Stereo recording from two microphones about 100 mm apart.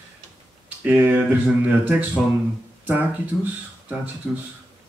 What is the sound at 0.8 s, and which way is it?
Speech, 20° right (ahead or behind).